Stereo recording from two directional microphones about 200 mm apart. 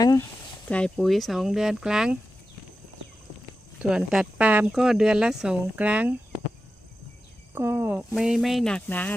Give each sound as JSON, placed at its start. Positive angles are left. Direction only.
{"t": 0.0, "sound": "speech", "side_deg": 20}
{"t": 0.7, "sound": "speech", "side_deg": 5}
{"t": 3.8, "sound": "speech", "side_deg": -5}
{"t": 7.5, "sound": "speech", "side_deg": -10}